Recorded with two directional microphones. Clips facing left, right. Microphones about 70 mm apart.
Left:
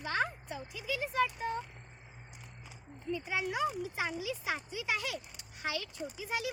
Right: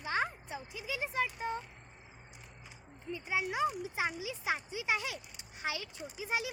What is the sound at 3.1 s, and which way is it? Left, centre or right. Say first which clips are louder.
Speech: left 1 dB; centre.